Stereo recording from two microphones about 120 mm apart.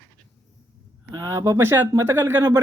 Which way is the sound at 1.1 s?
25° right (ahead or behind).